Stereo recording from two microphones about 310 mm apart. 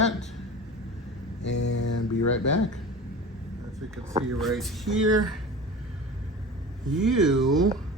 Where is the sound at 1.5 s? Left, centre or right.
Left.